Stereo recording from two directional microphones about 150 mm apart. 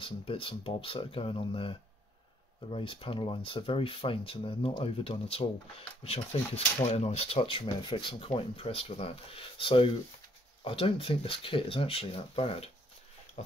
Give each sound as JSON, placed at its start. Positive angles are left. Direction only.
{"t": 0.0, "sound": "speech", "side_deg": 35}